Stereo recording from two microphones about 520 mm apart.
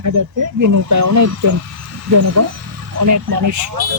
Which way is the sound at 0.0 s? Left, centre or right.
Right.